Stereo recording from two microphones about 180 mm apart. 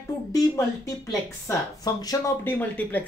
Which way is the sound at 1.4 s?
20° left (ahead or behind).